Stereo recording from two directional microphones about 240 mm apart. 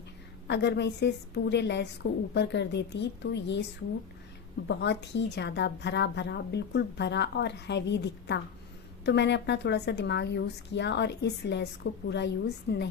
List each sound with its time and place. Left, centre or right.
0.4 s a woman's voice: left
4.7 s a woman's voice: left